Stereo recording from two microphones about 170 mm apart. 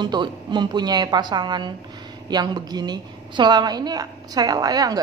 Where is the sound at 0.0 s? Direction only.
25° right (ahead or behind).